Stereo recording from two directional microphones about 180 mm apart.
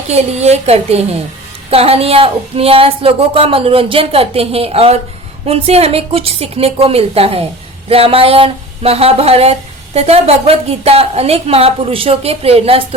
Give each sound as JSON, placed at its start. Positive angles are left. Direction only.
{"t": 0.1, "sound": "speech", "side_deg": -35}